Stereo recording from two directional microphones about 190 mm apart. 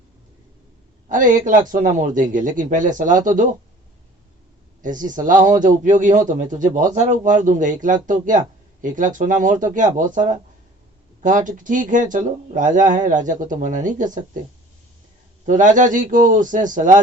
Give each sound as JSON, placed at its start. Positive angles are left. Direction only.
{"t": 1.0, "sound": "speech", "side_deg": -45}
{"t": 4.8, "sound": "speech", "side_deg": -45}
{"t": 15.4, "sound": "speech", "side_deg": -40}